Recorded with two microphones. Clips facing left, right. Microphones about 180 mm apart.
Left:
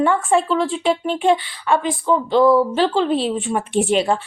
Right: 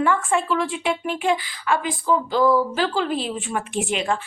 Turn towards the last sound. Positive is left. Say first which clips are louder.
# left 6 dB
turn(degrees=35)  # may be behind; listen again after turning